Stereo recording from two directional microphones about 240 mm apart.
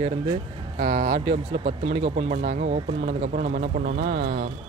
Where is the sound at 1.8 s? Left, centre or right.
Right.